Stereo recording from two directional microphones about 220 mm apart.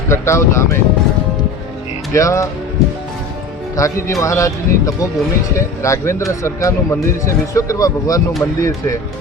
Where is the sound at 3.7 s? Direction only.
15° left (ahead or behind).